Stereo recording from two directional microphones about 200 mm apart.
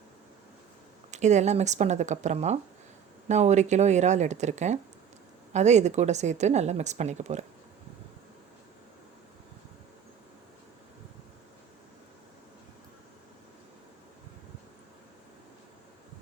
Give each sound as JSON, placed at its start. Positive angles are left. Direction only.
{"t": 1.1, "sound": "a woman's voice", "side_deg": -35}